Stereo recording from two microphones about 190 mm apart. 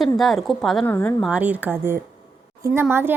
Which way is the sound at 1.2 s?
5° right (ahead or behind).